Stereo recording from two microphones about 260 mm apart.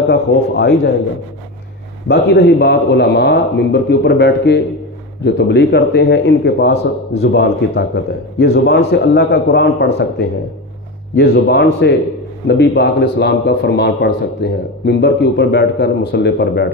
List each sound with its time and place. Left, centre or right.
0.1 s a man's voice: left
2.0 s a man's voice: left